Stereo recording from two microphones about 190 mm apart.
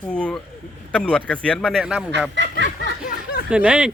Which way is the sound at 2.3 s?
70° right (ahead or behind).